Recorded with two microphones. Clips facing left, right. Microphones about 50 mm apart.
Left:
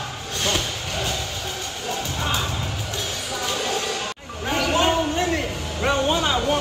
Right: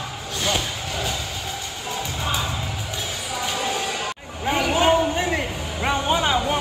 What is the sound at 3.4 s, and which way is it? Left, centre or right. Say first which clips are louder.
Music: even; centre.